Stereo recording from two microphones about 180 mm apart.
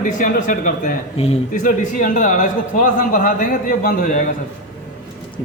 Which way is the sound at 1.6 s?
45° left (ahead or behind).